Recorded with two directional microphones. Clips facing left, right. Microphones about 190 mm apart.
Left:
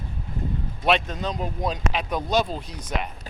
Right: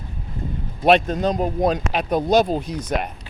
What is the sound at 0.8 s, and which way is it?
Speech, 40° right (ahead or behind).